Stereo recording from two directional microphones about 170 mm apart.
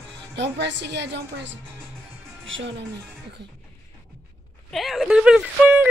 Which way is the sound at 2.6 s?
90° right.